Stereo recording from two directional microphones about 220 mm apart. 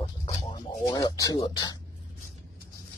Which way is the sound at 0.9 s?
15° left (ahead or behind).